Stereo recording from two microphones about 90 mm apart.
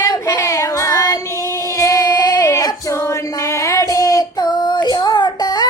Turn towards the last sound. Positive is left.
turn(degrees=50)  # may be behind; listen again after turning